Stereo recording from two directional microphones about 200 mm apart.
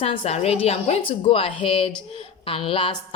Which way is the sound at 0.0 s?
25° left (ahead or behind).